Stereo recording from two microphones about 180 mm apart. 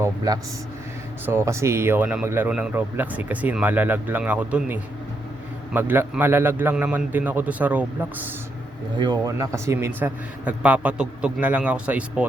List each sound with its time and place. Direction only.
0.3 s a man's voice: 20° right (ahead or behind)
9.0 s speech: 20° right (ahead or behind)